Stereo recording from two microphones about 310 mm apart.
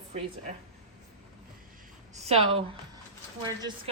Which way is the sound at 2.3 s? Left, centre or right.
Centre.